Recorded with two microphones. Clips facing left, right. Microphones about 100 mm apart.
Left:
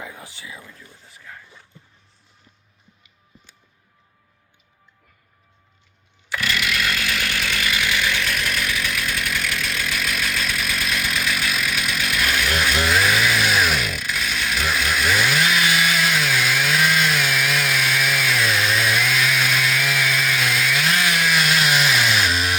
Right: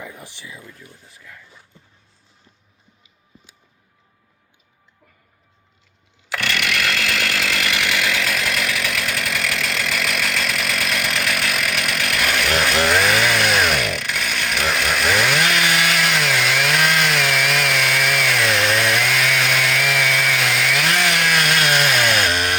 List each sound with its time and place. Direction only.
6.2 s chainsaw: 75° right (ahead or behind); by 22.5 s 60° right (ahead or behind)